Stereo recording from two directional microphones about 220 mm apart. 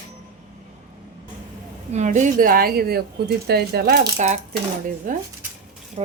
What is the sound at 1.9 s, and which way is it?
A woman's voice, 35° right (ahead or behind).